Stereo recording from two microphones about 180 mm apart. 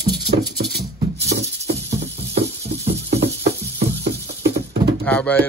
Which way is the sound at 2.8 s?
35° right (ahead or behind).